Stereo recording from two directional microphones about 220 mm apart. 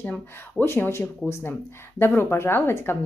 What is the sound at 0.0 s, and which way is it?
A woman's voice, 10° left (ahead or behind).